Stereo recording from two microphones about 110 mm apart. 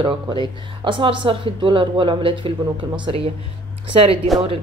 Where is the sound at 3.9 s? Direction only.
55° right (ahead or behind).